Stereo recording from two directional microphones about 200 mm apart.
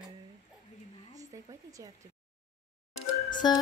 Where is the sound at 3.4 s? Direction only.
20° left (ahead or behind).